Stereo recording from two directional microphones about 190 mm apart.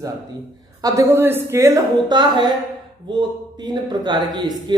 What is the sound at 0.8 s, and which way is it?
A man's voice, 15° right (ahead or behind).